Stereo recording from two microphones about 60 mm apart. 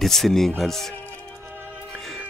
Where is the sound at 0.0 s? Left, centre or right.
Centre.